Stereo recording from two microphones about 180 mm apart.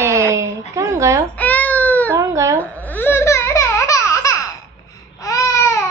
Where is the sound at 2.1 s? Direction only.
15° right (ahead or behind).